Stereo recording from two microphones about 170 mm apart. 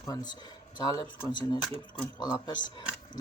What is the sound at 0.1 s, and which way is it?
Speech, 25° left (ahead or behind).